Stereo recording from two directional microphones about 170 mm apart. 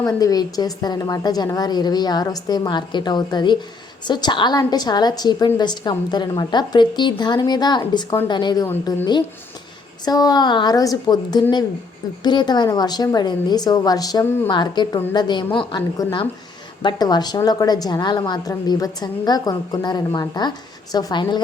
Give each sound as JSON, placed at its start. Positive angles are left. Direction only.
{"t": 0.0, "sound": "a woman's voice", "side_deg": 20}
{"t": 10.1, "sound": "a woman's voice", "side_deg": 20}